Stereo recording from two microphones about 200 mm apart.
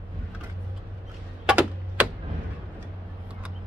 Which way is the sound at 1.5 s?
5° right (ahead or behind).